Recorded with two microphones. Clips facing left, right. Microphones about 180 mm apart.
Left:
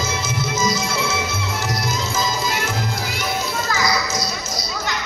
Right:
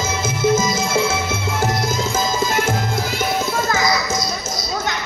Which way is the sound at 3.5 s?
50° right (ahead or behind).